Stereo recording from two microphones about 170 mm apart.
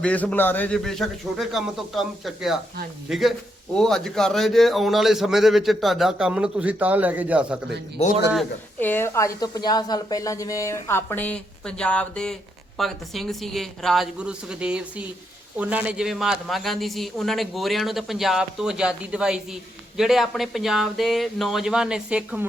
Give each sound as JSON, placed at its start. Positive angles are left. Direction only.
{"t": 0.0, "sound": "a man's voice", "side_deg": 5}
{"t": 8.0, "sound": "a man's voice", "side_deg": 35}
{"t": 8.8, "sound": "a woman's voice", "side_deg": 10}